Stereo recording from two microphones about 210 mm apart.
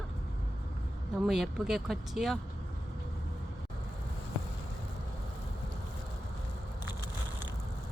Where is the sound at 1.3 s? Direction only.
Centre (ahead or behind).